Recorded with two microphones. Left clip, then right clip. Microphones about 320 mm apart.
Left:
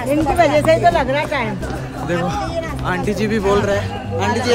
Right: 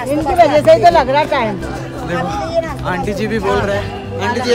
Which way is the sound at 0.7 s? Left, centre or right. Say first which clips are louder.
Right 5 dB; centre.